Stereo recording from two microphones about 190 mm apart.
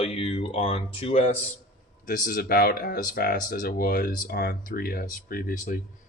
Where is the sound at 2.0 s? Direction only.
45° left (ahead or behind).